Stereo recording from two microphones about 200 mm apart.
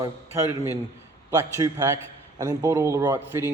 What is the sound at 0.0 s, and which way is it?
A man's voice, 15° right (ahead or behind).